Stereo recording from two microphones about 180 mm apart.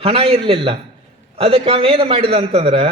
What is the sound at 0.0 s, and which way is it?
A man's voice, 30° right (ahead or behind).